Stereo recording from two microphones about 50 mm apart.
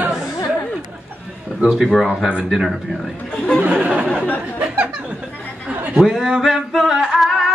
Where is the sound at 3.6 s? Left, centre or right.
Right.